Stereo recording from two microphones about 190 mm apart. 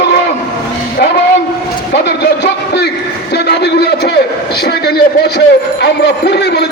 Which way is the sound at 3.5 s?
60° left (ahead or behind).